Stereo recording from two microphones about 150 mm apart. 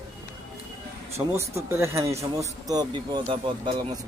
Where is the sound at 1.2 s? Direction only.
20° right (ahead or behind).